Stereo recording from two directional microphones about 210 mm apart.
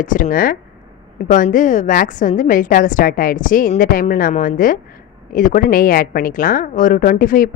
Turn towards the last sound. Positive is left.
turn(degrees=40)  # may be behind; listen again after turning